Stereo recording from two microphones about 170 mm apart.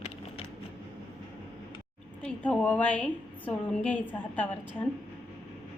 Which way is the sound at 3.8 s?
10° left (ahead or behind).